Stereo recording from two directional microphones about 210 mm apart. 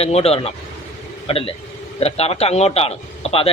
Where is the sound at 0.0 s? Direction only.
30° left (ahead or behind).